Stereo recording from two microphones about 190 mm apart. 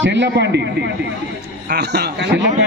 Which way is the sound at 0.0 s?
70° right (ahead or behind).